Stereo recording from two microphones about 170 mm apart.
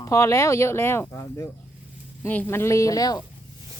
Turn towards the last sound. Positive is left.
turn(degrees=20)  # may be behind; listen again after turning